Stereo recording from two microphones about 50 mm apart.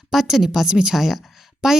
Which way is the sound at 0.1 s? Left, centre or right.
Centre.